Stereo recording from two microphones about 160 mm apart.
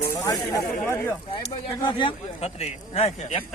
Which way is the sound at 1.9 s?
30° left (ahead or behind).